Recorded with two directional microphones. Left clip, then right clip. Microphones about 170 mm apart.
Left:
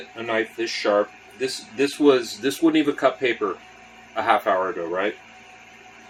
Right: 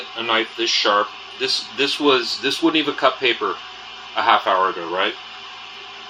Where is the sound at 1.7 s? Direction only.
65° left (ahead or behind).